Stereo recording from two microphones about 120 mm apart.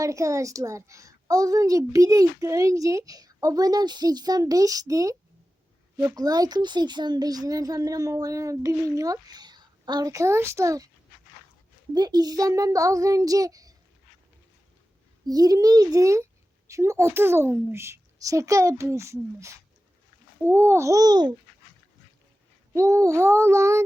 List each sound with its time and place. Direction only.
0.0 s a child's voice: 25° right (ahead or behind)
11.9 s a child's voice: 35° right (ahead or behind)
15.3 s a child's voice: 30° right (ahead or behind)
22.7 s a child's voice: 25° right (ahead or behind)